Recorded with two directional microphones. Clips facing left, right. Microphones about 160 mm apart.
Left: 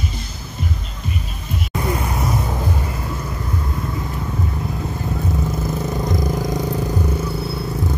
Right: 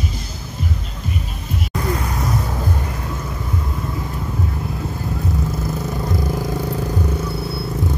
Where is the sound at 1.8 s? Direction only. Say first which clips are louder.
Left 1 dB; 25° left (ahead or behind).